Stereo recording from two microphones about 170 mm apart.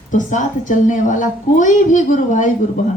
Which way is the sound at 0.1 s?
50° left (ahead or behind).